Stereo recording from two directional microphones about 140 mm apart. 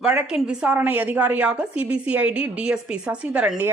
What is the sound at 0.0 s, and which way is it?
Speech, 5° right (ahead or behind).